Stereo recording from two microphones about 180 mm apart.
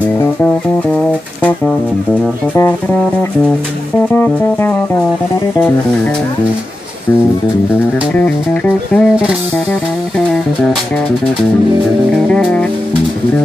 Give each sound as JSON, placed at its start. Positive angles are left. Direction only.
{"t": 2.5, "sound": "music", "side_deg": 15}
{"t": 4.1, "sound": "music", "side_deg": 10}
{"t": 8.1, "sound": "music", "side_deg": 10}
{"t": 12.3, "sound": "music", "side_deg": 5}